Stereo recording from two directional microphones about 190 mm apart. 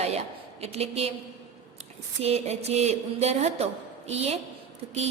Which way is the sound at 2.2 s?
35° right (ahead or behind).